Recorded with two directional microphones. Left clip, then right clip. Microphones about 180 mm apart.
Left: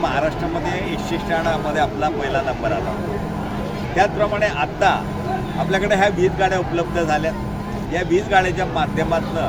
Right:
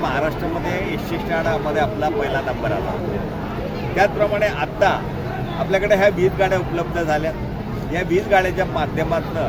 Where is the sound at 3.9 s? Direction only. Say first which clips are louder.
Even; 5° right (ahead or behind).